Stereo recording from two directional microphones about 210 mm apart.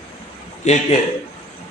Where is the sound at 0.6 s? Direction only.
30° left (ahead or behind).